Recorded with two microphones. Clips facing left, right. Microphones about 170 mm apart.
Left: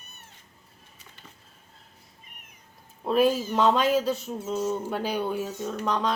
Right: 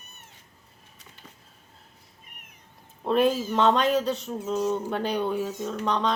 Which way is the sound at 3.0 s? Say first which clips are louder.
Even; 5° left (ahead or behind).